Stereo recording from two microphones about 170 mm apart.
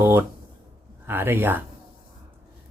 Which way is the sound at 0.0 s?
15° right (ahead or behind).